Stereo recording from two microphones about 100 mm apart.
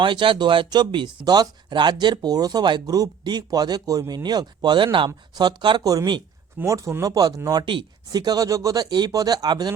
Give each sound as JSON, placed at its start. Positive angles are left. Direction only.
{"t": 0.0, "sound": "speech", "side_deg": -55}
{"t": 5.3, "sound": "speech", "side_deg": -45}
{"t": 7.6, "sound": "speech", "side_deg": -55}